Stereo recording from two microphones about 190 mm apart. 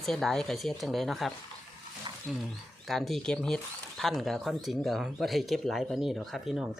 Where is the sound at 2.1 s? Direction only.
25° right (ahead or behind).